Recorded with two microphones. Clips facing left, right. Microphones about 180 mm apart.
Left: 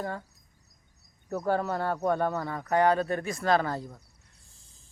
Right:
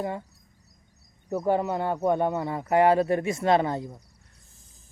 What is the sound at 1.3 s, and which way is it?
Speech, 15° right (ahead or behind).